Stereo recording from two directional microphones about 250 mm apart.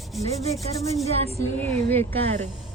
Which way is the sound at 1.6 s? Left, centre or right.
Centre.